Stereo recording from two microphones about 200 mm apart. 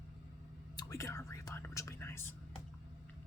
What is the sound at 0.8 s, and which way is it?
Speech, 15° left (ahead or behind).